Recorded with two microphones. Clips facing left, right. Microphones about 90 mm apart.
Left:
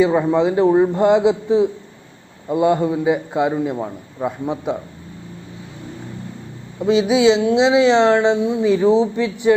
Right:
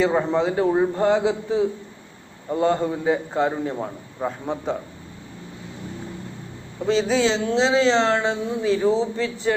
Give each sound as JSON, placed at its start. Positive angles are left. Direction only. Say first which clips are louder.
{"t": 0.0, "sound": "speech", "louder": "left 5 dB", "side_deg": 5}
{"t": 0.3, "sound": "a man's voice", "louder": "left 7 dB", "side_deg": 20}
{"t": 6.8, "sound": "speech", "louder": "left 6 dB", "side_deg": 10}